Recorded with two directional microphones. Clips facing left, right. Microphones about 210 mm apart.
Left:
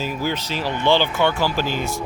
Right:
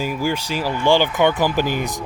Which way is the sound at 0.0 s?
10° right (ahead or behind).